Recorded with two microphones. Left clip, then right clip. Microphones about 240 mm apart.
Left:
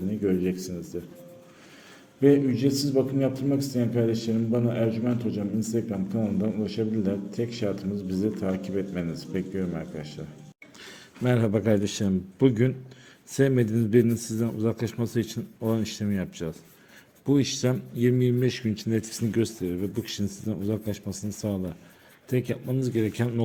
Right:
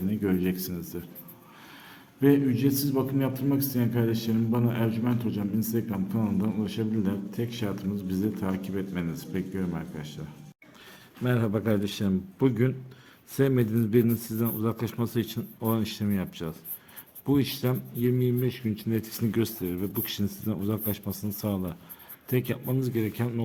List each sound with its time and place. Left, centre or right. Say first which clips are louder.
0.2 s a man's voice: left 4 dB; centre
2.2 s a man's voice: left 2 dB; centre
11.2 s speech: left 3 dB; centre